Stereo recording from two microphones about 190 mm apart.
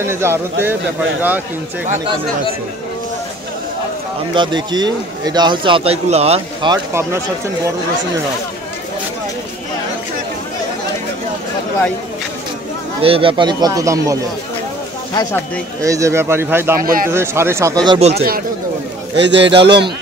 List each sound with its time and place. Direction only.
0.0 s speech: 15° right (ahead or behind)
4.3 s a man's voice: 25° right (ahead or behind)
6.7 s speech: 15° right (ahead or behind)
13.0 s a man's voice: 30° right (ahead or behind)
15.8 s speech: 15° right (ahead or behind)
16.8 s speech: 50° right (ahead or behind)
17.1 s speech: 15° right (ahead or behind)
17.9 s speech: 35° right (ahead or behind)
19.1 s a man's voice: 70° right (ahead or behind)